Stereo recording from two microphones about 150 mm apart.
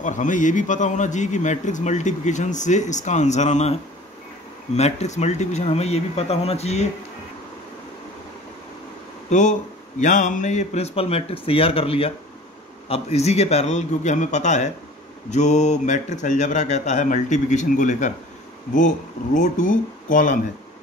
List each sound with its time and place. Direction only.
0.0 s a man's voice: 55° left (ahead or behind)
4.7 s a man's voice: 45° left (ahead or behind)
9.3 s a man's voice: 55° left (ahead or behind)